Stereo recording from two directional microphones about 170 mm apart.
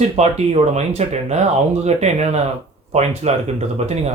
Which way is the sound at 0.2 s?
40° right (ahead or behind).